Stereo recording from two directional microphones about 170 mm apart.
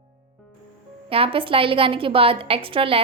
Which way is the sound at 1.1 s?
35° right (ahead or behind).